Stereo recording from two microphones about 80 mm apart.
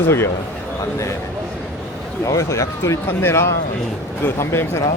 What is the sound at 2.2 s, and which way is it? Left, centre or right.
Speech, left.